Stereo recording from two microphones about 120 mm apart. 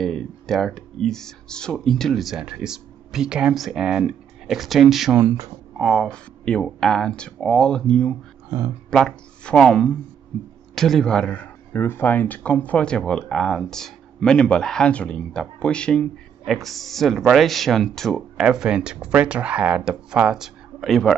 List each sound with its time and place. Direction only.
0.0 s speech: centre (ahead or behind)
8.5 s speech: 25° right (ahead or behind)
8.9 s speech: 5° left (ahead or behind)